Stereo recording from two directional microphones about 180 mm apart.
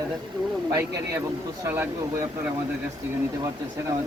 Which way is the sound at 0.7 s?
15° right (ahead or behind).